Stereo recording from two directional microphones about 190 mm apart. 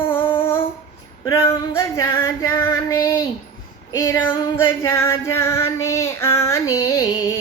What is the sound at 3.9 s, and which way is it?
Female singing, 15° left (ahead or behind).